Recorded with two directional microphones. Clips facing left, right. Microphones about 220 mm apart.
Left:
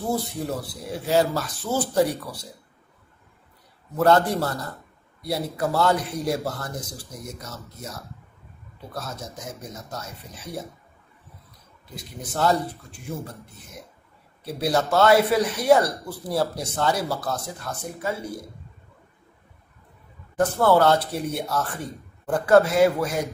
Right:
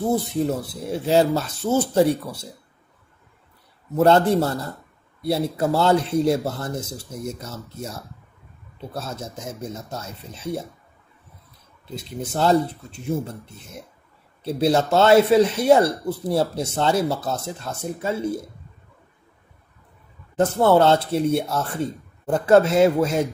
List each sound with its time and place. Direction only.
0.1 s speech: 25° right (ahead or behind)
3.9 s speech: 25° right (ahead or behind)
8.9 s speech: 25° right (ahead or behind)
11.9 s speech: 25° right (ahead or behind)
14.4 s speech: 25° right (ahead or behind)
20.3 s speech: 25° right (ahead or behind)